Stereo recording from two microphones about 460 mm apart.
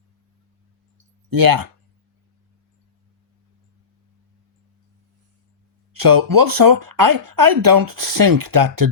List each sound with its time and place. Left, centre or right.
1.3 s speech: right
5.9 s speech: right